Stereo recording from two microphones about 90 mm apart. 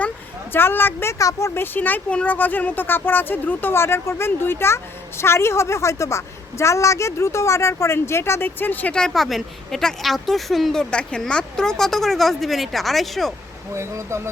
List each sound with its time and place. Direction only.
0.5 s speech: 25° left (ahead or behind)
1.2 s speech: 35° left (ahead or behind); by 13.3 s centre (ahead or behind)
13.7 s speech: 30° right (ahead or behind)